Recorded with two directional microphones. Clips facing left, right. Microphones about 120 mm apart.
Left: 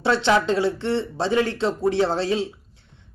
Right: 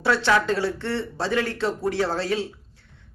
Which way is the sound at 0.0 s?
25° left (ahead or behind).